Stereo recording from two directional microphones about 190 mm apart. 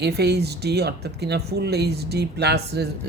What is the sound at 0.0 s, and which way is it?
Speech, 60° right (ahead or behind).